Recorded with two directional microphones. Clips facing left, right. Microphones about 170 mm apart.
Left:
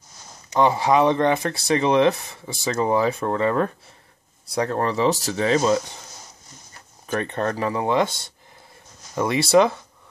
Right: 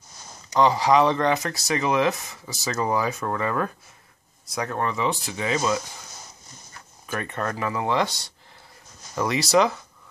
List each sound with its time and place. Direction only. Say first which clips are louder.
0.5 s speech: left 1 dB; 25° left (ahead or behind)
7.1 s speech: left 5 dB; 30° left (ahead or behind)
9.1 s speech: left 4 dB; 25° left (ahead or behind)